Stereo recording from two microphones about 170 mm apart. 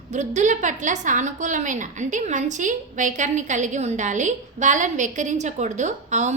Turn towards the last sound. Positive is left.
turn(degrees=-45)  # may be behind; listen again after turning